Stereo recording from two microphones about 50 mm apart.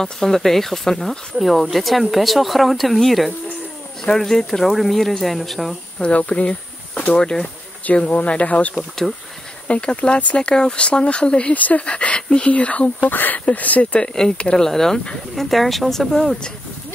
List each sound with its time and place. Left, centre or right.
0.0 s speech: centre
5.9 s speech: left
7.8 s speech: left
13.1 s speech: left
14.0 s speech: centre